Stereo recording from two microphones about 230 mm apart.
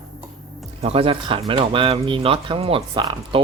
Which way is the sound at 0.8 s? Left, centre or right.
Right.